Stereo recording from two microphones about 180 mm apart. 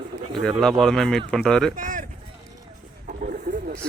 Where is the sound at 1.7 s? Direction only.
45° right (ahead or behind).